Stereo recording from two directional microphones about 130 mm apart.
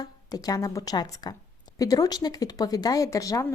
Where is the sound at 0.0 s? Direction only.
30° left (ahead or behind).